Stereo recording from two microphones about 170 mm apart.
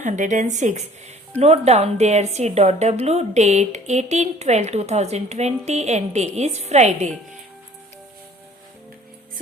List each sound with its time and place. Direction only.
0.0 s speech: 45° right (ahead or behind)